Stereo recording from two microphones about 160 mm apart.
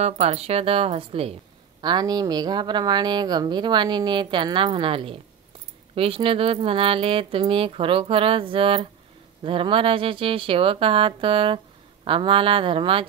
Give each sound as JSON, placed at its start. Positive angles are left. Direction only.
{"t": 0.0, "sound": "speech", "side_deg": -40}
{"t": 1.8, "sound": "speech", "side_deg": -25}